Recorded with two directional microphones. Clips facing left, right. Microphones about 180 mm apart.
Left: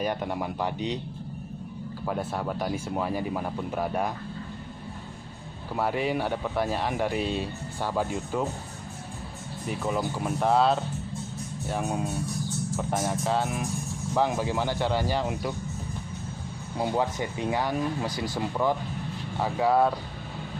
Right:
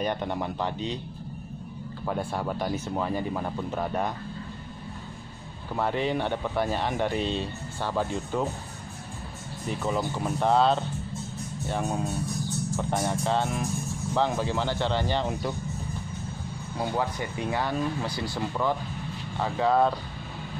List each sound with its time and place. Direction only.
0.0 s speech: 5° left (ahead or behind)
2.0 s speech: centre (ahead or behind)
5.8 s speech: 5° left (ahead or behind)
9.7 s speech: 5° left (ahead or behind)
16.7 s speech: 20° left (ahead or behind)